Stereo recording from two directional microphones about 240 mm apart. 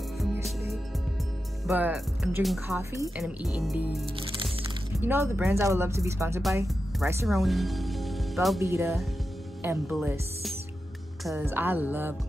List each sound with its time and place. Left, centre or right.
0.2 s music: centre
1.7 s speech: centre
3.2 s speech: centre
4.2 s music: right
5.0 s speech: centre
7.2 s speech: centre
8.5 s speech: centre